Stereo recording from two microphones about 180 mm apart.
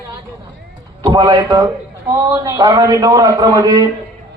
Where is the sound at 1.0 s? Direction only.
20° right (ahead or behind).